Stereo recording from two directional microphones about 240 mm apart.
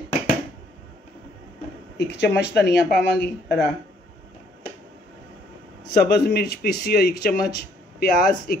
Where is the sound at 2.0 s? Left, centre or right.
Left.